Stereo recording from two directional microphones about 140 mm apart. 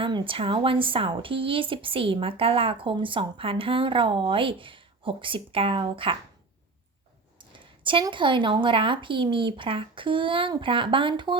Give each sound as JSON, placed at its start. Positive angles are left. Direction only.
{"t": 0.0, "sound": "speech", "side_deg": -40}
{"t": 7.3, "sound": "speech", "side_deg": -35}